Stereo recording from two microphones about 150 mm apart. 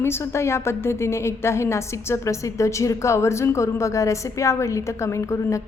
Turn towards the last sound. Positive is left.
turn(degrees=20)  # may be behind; listen again after turning